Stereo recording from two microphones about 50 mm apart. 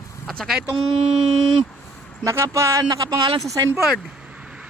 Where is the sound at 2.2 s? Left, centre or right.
Right.